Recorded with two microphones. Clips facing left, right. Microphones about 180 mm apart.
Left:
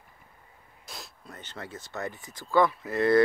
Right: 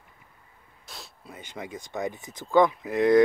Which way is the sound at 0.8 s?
Centre (ahead or behind).